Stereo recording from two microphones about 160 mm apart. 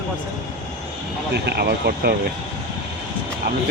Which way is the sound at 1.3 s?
90° right.